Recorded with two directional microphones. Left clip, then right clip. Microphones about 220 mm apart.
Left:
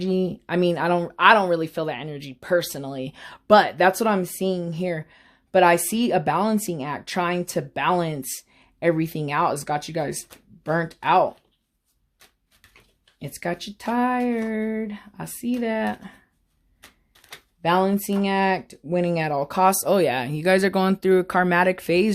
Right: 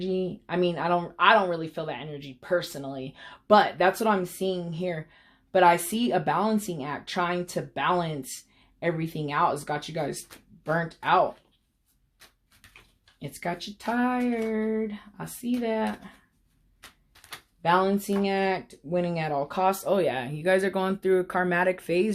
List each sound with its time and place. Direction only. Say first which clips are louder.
0.0 s speech: left 5 dB; 50° left (ahead or behind)
13.1 s speech: left 4 dB; 50° left (ahead or behind)
17.6 s speech: left 2 dB; 45° left (ahead or behind)